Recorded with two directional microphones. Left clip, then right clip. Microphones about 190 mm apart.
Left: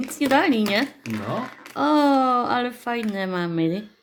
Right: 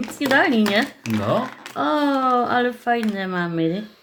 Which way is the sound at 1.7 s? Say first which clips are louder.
Left 2 dB; 30° left (ahead or behind).